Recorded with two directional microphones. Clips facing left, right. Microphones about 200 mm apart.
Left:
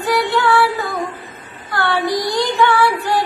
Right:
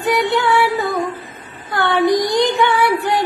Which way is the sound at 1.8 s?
20° right (ahead or behind).